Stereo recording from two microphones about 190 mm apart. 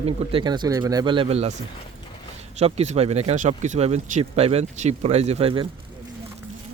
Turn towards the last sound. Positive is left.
turn(degrees=-30)  # may be behind; listen again after turning